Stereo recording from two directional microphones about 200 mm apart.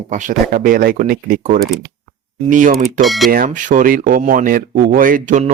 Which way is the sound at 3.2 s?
45° right (ahead or behind).